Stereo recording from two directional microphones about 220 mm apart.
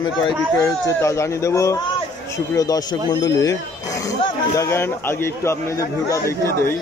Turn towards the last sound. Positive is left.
turn(degrees=15)  # may be behind; listen again after turning